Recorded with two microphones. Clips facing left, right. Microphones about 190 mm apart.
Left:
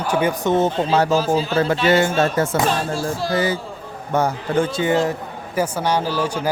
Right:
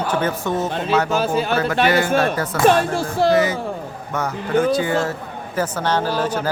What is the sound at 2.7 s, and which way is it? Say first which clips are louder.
Music: right 4 dB; 60° right (ahead or behind).